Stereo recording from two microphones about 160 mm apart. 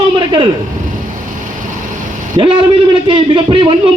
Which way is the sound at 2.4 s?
35° right (ahead or behind).